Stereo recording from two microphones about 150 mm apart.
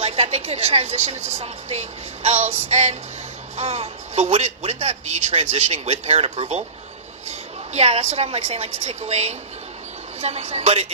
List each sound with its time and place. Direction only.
0.0 s a man's voice: 45° right (ahead or behind)